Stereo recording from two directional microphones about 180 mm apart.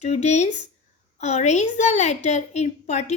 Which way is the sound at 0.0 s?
40° left (ahead or behind).